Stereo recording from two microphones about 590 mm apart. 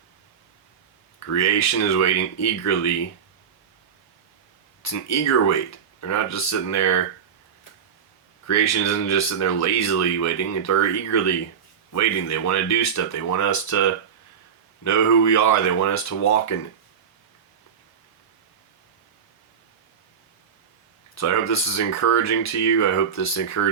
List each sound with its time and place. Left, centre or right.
1.3 s speech: left
4.8 s speech: left
8.4 s speech: left
21.2 s speech: left